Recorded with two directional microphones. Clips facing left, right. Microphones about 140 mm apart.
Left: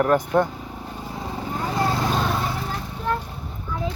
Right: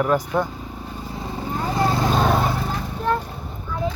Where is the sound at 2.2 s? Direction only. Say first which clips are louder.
Right 5 dB; 60° right (ahead or behind).